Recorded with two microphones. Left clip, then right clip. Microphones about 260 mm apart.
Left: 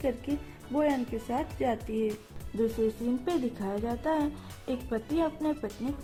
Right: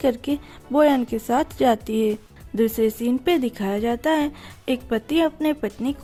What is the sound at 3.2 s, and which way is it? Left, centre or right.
Speech, right.